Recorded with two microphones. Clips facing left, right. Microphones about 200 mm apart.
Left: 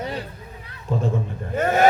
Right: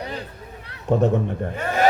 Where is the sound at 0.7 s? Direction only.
75° right (ahead or behind).